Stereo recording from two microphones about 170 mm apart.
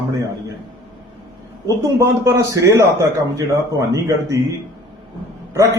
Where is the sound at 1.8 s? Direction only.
20° right (ahead or behind).